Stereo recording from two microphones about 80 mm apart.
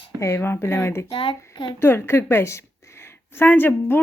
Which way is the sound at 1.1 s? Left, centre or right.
Left.